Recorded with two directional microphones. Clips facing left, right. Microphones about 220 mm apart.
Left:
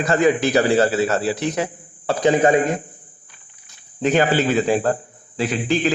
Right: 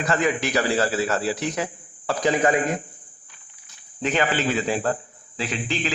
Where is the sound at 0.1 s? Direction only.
35° left (ahead or behind).